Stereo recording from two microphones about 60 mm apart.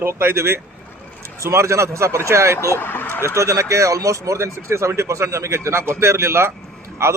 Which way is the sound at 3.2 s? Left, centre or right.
Right.